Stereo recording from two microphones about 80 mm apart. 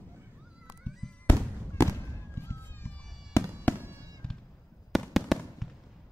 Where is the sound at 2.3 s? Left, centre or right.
Left.